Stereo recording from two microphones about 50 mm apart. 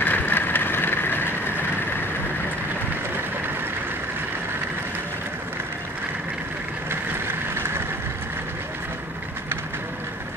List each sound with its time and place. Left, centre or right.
0.0 s vehicle: left
6.9 s vehicle: right